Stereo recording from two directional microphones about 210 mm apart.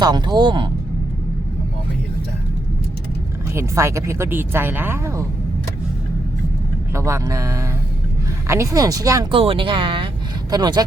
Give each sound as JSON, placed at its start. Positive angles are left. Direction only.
{"t": 0.0, "sound": "speech", "side_deg": -20}
{"t": 3.5, "sound": "speech", "side_deg": -15}
{"t": 6.9, "sound": "speech", "side_deg": -15}